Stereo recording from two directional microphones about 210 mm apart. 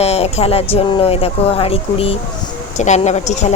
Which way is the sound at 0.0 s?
30° left (ahead or behind).